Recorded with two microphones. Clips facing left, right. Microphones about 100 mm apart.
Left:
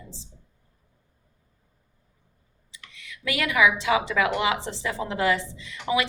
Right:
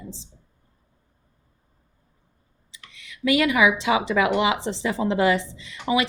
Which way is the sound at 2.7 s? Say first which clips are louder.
Left 1 dB; 25° right (ahead or behind).